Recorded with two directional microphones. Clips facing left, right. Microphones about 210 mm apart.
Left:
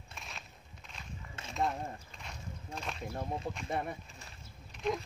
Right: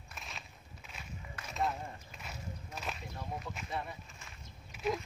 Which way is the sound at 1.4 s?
25° left (ahead or behind).